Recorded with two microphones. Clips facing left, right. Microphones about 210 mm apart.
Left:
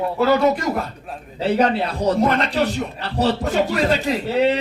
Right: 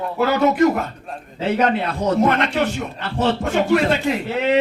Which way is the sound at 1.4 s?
35° left (ahead or behind).